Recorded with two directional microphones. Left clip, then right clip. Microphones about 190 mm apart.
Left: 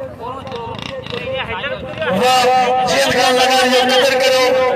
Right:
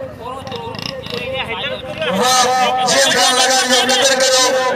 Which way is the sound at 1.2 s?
25° right (ahead or behind).